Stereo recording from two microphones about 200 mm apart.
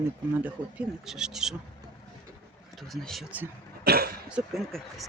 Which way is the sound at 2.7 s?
Centre (ahead or behind).